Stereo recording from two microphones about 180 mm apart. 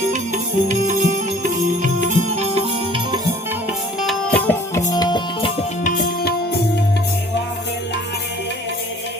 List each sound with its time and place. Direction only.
0.7 s music: 45° right (ahead or behind)
4.0 s music: 5° left (ahead or behind); by 5.6 s 25° left (ahead or behind)
5.8 s music: 55° left (ahead or behind)